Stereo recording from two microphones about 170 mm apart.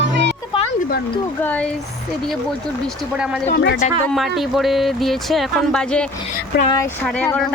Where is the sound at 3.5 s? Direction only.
85° left.